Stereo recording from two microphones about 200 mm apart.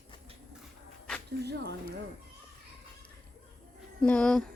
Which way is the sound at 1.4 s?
55° right (ahead or behind).